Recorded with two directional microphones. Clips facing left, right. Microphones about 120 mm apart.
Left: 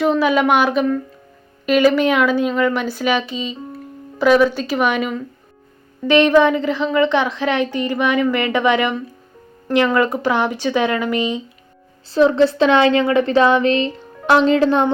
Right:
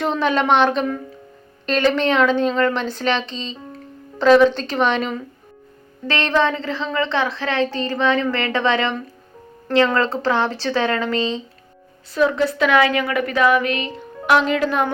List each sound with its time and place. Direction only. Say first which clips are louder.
0.0 s a woman's voice: left 4 dB; 5° left (ahead or behind)
12.1 s speech: left 5 dB; 30° left (ahead or behind)